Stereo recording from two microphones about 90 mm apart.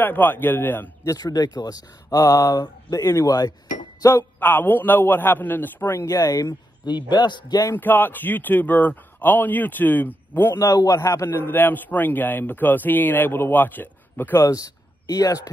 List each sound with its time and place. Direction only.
0.0 s a man's voice: 20° left (ahead or behind)
1.0 s speech: 45° left (ahead or behind)
4.0 s a man's voice: 30° left (ahead or behind)
4.4 s a man's voice: 20° left (ahead or behind); by 7.6 s 55° left (ahead or behind)
7.7 s a man's voice: 20° left (ahead or behind)
10.6 s a man's voice: 40° left (ahead or behind)
11.0 s a man's voice: 30° left (ahead or behind)
14.4 s speech: 40° left (ahead or behind)